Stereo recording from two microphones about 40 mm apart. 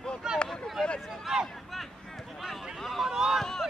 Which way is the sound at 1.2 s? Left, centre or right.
Centre.